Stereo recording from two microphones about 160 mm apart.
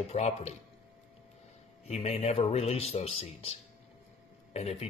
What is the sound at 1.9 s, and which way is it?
Speech, 40° left (ahead or behind).